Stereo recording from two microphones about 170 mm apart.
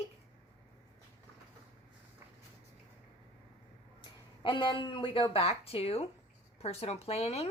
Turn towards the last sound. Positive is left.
turn(degrees=35)  # may be behind; listen again after turning